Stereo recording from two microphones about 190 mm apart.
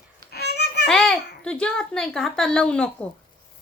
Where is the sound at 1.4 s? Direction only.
5° left (ahead or behind).